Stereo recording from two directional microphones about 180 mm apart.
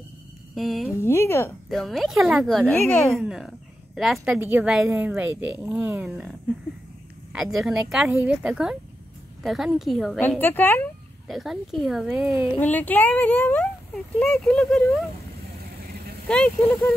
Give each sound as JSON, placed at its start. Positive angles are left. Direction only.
{"t": 0.6, "sound": "speech", "side_deg": 0}
{"t": 1.0, "sound": "speech", "side_deg": 15}
{"t": 1.7, "sound": "a woman's voice", "side_deg": 0}
{"t": 7.5, "sound": "speech", "side_deg": 0}
{"t": 10.4, "sound": "speech", "side_deg": 10}
{"t": 11.2, "sound": "speech", "side_deg": 0}
{"t": 12.5, "sound": "speech", "side_deg": 10}
{"t": 15.8, "sound": "vehicle", "side_deg": -60}
{"t": 16.3, "sound": "speech", "side_deg": 5}